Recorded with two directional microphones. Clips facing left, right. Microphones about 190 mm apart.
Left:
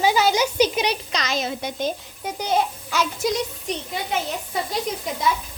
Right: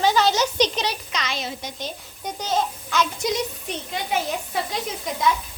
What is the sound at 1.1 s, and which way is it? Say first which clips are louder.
Speech: left 4 dB; 40° left (ahead or behind).